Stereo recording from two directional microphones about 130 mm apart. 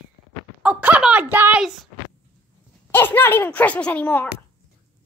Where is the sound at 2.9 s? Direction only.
15° left (ahead or behind).